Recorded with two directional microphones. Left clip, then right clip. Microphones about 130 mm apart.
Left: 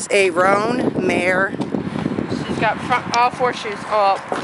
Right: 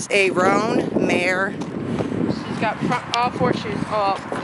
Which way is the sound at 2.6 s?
25° left (ahead or behind).